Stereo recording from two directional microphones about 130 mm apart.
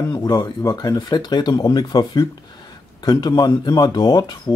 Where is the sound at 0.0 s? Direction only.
25° left (ahead or behind).